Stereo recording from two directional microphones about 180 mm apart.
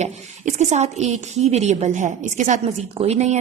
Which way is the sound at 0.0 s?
40° right (ahead or behind).